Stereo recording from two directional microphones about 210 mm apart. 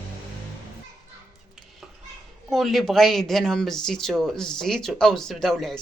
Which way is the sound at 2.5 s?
Centre (ahead or behind).